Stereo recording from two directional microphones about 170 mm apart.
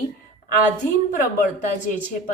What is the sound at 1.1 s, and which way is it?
Speech, 50° left (ahead or behind).